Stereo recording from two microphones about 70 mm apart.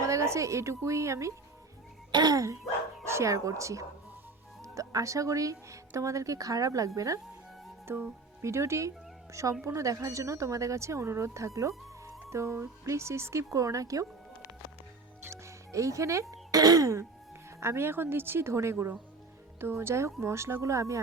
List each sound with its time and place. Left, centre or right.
0.0 s a woman's voice: right
2.1 s music: right
3.0 s a woman's voice: right
7.9 s speech: right
8.4 s speech: right
15.3 s music: right
16.6 s music: right
17.6 s speech: right